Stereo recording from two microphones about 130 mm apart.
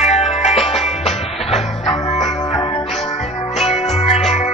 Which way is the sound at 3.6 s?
50° left (ahead or behind).